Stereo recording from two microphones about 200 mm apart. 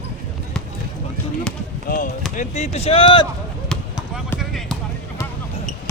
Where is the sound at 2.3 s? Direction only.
35° left (ahead or behind).